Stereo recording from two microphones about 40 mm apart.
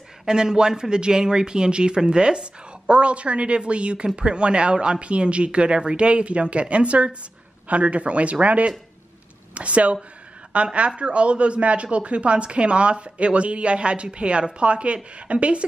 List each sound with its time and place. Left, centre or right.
0.2 s a woman's voice: centre